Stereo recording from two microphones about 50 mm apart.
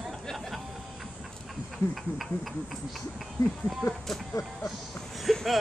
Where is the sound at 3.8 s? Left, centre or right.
Left.